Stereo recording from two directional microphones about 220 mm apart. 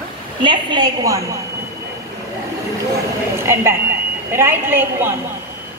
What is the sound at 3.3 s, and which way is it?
A woman's voice, 10° right (ahead or behind).